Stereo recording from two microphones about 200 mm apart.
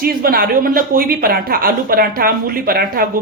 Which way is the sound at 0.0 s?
45° right (ahead or behind).